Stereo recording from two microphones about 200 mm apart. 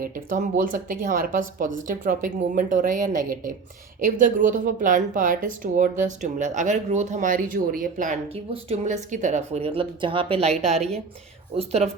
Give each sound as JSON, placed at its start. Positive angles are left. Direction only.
{"t": 0.0, "sound": "speech", "side_deg": -40}
{"t": 11.5, "sound": "speech", "side_deg": -30}